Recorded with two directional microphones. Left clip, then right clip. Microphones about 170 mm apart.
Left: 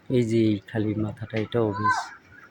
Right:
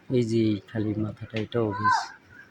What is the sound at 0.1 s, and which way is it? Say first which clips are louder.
Speech: left 2 dB; 5° left (ahead or behind).